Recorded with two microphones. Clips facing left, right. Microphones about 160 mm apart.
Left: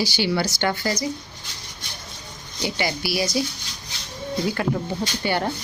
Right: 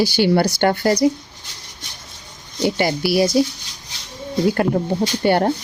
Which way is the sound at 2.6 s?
50° right (ahead or behind).